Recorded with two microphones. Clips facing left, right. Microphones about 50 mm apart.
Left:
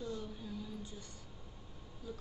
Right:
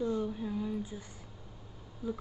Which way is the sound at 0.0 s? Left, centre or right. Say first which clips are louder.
Right 10 dB; right.